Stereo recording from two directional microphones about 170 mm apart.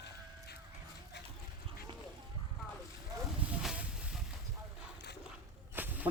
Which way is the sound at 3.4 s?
5° right (ahead or behind).